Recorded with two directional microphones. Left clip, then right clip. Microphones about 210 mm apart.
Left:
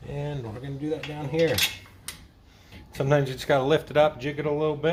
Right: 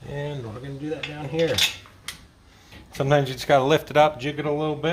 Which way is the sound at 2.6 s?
30° right (ahead or behind).